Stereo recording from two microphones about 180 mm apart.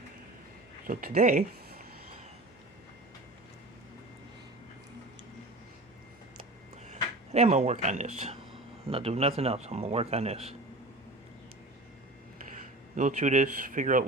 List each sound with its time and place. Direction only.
0.9 s a man's voice: 50° right (ahead or behind)
6.8 s speech: 40° right (ahead or behind)
13.0 s a man's voice: 40° right (ahead or behind)